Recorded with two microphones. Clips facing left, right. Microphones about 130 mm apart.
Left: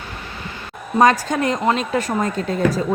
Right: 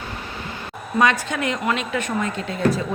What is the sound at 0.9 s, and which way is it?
A woman's voice, 40° left (ahead or behind).